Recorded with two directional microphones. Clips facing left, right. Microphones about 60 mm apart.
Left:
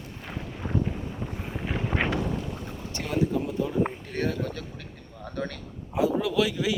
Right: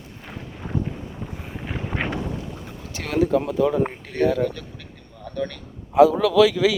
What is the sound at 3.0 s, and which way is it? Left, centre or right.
Speech, right.